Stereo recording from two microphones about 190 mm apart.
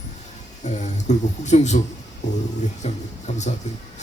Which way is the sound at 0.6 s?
40° left (ahead or behind).